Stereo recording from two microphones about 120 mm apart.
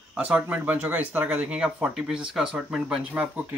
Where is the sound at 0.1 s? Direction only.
10° right (ahead or behind).